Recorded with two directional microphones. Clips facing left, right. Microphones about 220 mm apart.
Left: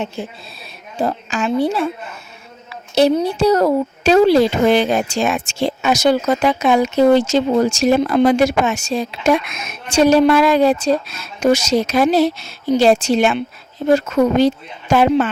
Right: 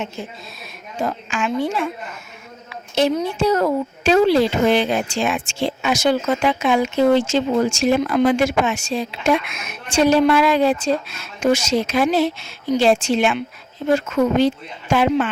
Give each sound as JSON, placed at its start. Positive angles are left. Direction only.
{"t": 0.9, "sound": "a woman's voice", "side_deg": 35}